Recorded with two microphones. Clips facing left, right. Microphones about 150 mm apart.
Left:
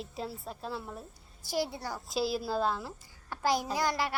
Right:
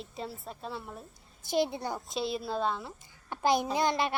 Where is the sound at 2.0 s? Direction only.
Centre (ahead or behind).